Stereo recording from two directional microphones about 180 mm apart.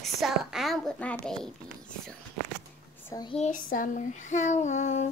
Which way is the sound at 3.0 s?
20° left (ahead or behind).